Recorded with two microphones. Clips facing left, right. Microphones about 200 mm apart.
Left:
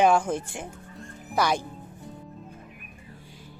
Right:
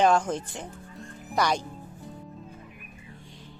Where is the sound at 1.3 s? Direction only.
5° left (ahead or behind).